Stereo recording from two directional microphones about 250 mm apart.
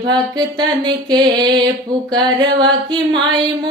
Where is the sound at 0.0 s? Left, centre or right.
Centre.